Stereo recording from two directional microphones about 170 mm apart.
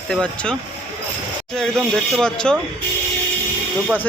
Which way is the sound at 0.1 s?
5° left (ahead or behind).